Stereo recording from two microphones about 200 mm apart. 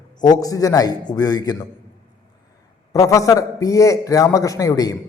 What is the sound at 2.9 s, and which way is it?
A man's voice, 15° left (ahead or behind).